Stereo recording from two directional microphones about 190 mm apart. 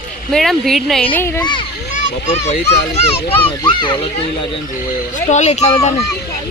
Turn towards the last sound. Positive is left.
turn(degrees=35)  # may be behind; listen again after turning